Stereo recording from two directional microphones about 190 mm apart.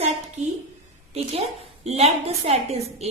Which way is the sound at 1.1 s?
35° right (ahead or behind).